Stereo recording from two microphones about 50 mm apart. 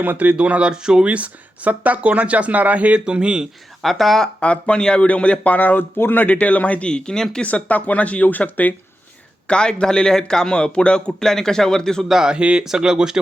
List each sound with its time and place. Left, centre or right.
0.0 s speech: right
0.3 s speech: right
1.0 s speech: right
3.0 s speech: centre
3.8 s speech: centre
4.4 s speech: left
7.4 s speech: left
9.5 s a man's voice: centre
12.0 s speech: centre